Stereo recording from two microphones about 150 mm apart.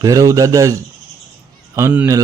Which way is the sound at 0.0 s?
20° right (ahead or behind).